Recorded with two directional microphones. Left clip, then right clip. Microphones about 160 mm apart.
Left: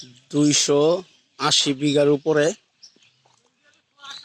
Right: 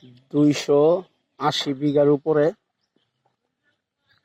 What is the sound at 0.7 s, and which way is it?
Speech, 45° left (ahead or behind).